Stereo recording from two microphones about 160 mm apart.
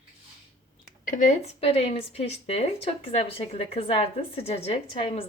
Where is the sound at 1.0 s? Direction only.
50° left (ahead or behind).